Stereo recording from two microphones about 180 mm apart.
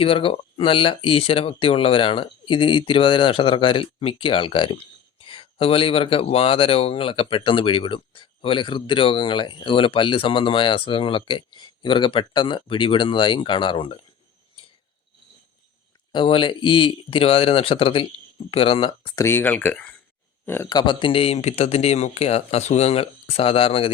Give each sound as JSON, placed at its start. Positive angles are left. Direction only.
{"t": 0.0, "sound": "speech", "side_deg": 30}
{"t": 16.1, "sound": "speech", "side_deg": 30}
{"t": 19.2, "sound": "speech", "side_deg": 10}